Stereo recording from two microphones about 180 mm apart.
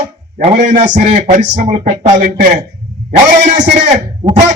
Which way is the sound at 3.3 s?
45° right (ahead or behind).